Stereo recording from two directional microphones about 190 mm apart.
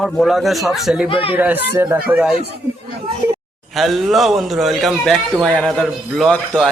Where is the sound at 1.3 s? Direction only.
10° right (ahead or behind).